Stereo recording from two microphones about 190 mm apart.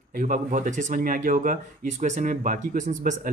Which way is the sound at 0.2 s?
45° right (ahead or behind).